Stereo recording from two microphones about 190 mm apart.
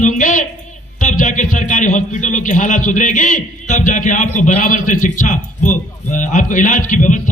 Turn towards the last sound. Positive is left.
turn(degrees=40)  # may be behind; listen again after turning